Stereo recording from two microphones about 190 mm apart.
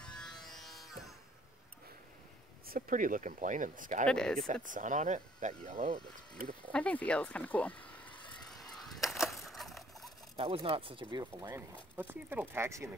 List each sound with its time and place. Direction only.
0.0 s music: 5° left (ahead or behind)
2.6 s speech: 50° right (ahead or behind)
4.1 s speech: 5° left (ahead or behind)
4.6 s speech: 40° right (ahead or behind)
6.7 s speech: 5° left (ahead or behind)
8.7 s a sound: centre (ahead or behind)
10.3 s speech: 30° right (ahead or behind)
12.0 s speech: 10° right (ahead or behind)